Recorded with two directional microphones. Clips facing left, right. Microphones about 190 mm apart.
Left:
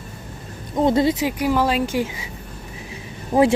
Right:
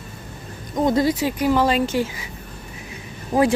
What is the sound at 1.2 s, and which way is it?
Speech, 10° left (ahead or behind).